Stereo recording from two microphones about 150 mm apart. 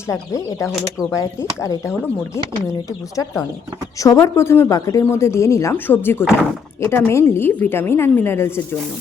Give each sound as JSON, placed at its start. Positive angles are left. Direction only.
{"t": 0.1, "sound": "speech", "side_deg": 20}
{"t": 4.0, "sound": "speech", "side_deg": 20}